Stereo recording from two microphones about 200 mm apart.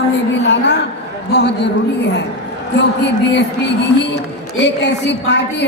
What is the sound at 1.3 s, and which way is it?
Speech, 60° left (ahead or behind).